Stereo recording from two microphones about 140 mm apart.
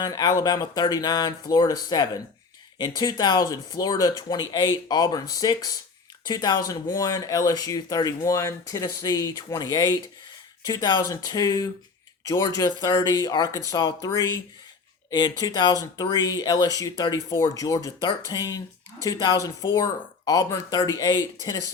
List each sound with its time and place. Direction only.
0.0 s speech: 30° left (ahead or behind)